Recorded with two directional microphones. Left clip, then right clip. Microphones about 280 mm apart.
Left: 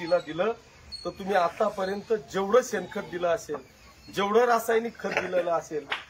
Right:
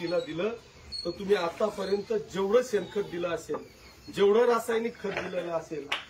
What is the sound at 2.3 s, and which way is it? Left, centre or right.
Speech, centre.